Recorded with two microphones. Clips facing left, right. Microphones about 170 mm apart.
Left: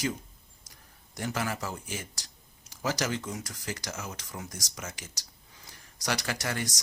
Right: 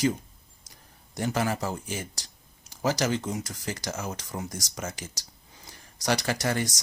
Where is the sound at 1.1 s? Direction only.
30° right (ahead or behind).